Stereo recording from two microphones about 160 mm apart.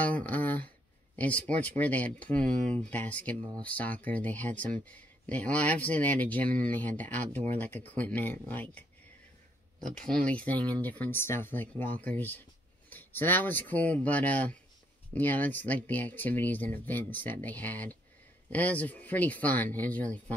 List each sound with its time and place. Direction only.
0.0 s speech: 10° left (ahead or behind)
9.8 s speech: 55° right (ahead or behind)
10.0 s speech: 5° left (ahead or behind)
12.9 s speech: 10° left (ahead or behind)